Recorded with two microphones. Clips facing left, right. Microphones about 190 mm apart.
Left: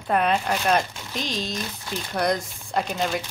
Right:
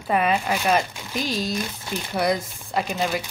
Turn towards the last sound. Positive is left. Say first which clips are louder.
# right 1 dB
turn(degrees=-5)  # may be behind; listen again after turning